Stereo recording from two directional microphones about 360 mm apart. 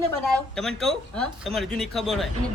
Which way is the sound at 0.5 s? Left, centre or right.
Centre.